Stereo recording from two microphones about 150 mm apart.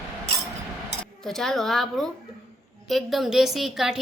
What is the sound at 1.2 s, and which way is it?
A woman's voice, 5° left (ahead or behind).